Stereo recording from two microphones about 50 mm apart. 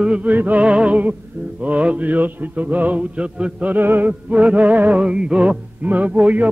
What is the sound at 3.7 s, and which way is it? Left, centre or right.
Music, right.